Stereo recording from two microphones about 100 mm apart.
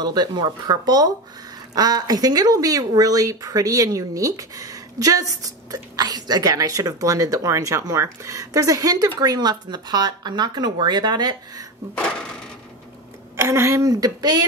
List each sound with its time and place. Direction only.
0.0 s speech: 45° right (ahead or behind)
13.4 s speech: 30° right (ahead or behind)